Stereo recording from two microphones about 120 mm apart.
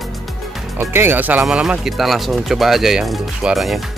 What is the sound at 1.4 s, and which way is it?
Speech, 5° right (ahead or behind).